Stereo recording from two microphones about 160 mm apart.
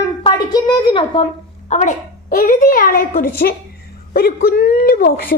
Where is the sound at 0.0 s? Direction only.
25° left (ahead or behind).